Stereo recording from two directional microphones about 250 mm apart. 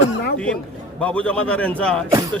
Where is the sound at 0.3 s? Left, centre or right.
Centre.